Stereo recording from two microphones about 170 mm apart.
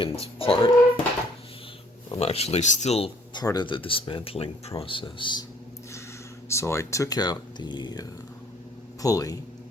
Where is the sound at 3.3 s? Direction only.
25° left (ahead or behind).